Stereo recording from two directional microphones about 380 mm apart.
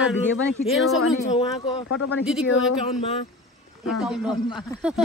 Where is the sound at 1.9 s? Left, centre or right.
Left.